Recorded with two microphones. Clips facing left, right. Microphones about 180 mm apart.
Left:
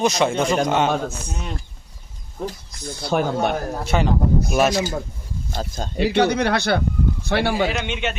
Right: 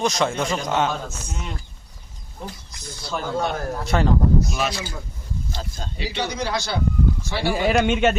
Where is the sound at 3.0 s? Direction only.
60° left (ahead or behind).